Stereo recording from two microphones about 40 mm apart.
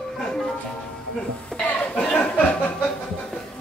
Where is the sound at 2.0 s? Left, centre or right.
Left.